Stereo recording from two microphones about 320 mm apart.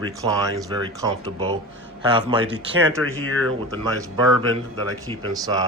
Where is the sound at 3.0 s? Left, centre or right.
Right.